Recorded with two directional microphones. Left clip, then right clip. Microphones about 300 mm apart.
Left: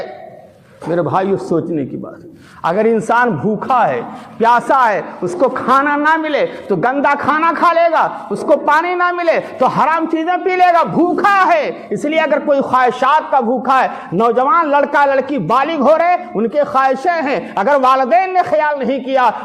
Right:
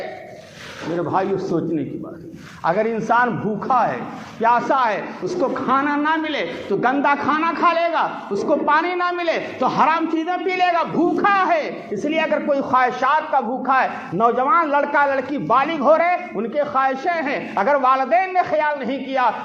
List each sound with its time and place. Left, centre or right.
0.9 s a man's voice: left